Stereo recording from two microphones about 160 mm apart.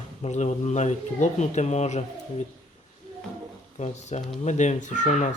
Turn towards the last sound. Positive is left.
turn(degrees=50)  # may be behind; listen again after turning